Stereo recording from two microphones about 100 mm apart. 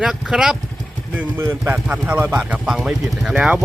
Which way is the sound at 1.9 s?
15° right (ahead or behind).